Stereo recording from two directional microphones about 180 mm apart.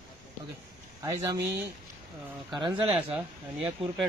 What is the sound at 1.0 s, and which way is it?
Speech, 20° right (ahead or behind).